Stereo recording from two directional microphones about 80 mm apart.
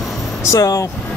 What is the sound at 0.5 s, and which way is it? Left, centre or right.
Speech, left.